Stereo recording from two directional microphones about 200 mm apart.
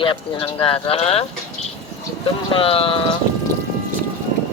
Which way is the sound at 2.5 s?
30° left (ahead or behind).